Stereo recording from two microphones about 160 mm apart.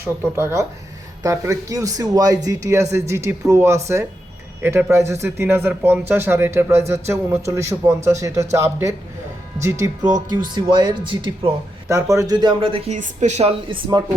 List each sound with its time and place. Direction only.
0.0 s speech: 15° right (ahead or behind)
11.9 s speech: 20° right (ahead or behind)
12.9 s speech: 45° right (ahead or behind)